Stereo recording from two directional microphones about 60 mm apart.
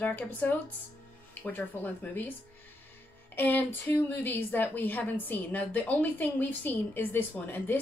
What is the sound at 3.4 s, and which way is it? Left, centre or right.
A woman's voice, left.